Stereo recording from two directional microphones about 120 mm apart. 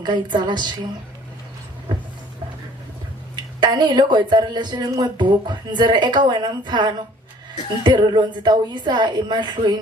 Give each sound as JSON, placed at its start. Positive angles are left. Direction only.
{"t": 0.0, "sound": "speech", "side_deg": -40}
{"t": 3.6, "sound": "speech", "side_deg": -40}